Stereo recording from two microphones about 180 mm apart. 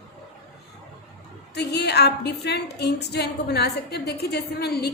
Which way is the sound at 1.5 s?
65° left (ahead or behind).